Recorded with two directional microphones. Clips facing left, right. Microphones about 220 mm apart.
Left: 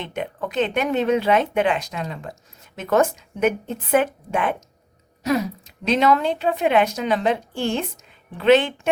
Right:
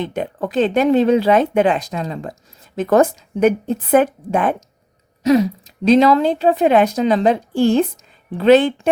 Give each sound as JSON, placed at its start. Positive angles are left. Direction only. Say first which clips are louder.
{"t": 0.0, "sound": "speech", "louder": "right 6 dB", "side_deg": -35}
{"t": 5.9, "sound": "speech", "louder": "right 6 dB", "side_deg": -35}